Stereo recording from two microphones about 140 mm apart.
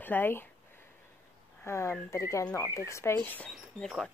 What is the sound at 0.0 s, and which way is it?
Speech, 15° left (ahead or behind).